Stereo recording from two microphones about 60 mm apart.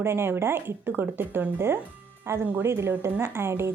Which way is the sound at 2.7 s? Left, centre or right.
Right.